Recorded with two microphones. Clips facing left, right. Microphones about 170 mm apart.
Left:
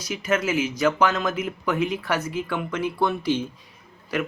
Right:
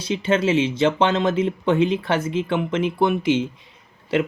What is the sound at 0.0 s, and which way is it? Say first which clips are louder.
Speech: right 4 dB; 30° right (ahead or behind).